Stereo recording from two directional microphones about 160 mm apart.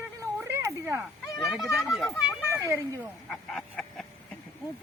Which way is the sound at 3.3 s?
Centre (ahead or behind).